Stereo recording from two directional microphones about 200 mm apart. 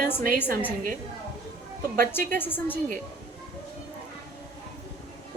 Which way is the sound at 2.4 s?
10° left (ahead or behind).